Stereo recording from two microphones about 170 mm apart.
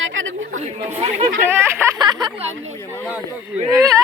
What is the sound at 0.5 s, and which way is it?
Speech, 40° right (ahead or behind).